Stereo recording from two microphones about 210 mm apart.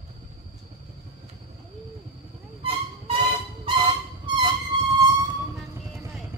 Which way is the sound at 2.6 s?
25° right (ahead or behind).